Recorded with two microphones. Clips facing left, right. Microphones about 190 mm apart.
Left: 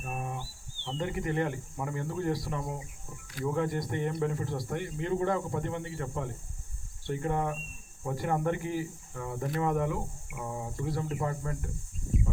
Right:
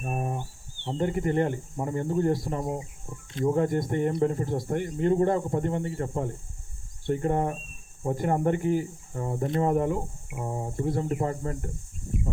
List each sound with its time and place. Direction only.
0.0 s a sound: 35° right (ahead or behind)
0.9 s speech: 45° right (ahead or behind); by 2.9 s 25° right (ahead or behind)
3.4 s speech: 40° right (ahead or behind); by 9.6 s 25° right (ahead or behind)
9.6 s speech: 40° right (ahead or behind)
10.8 s speech: 50° right (ahead or behind)
11.2 s speech: 35° right (ahead or behind)